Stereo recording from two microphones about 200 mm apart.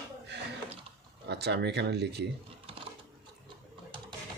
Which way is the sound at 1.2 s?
55° right (ahead or behind).